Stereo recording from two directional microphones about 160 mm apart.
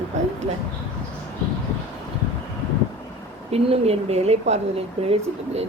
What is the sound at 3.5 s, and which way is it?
Speech, 40° right (ahead or behind).